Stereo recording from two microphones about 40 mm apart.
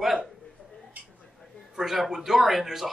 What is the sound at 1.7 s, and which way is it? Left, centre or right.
A man's voice, centre.